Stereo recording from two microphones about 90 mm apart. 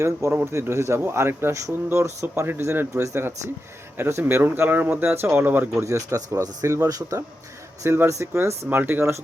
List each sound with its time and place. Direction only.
0.0 s speech: 30° right (ahead or behind)